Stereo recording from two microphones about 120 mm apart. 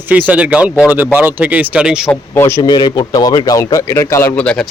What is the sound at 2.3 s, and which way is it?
Speech, 20° left (ahead or behind).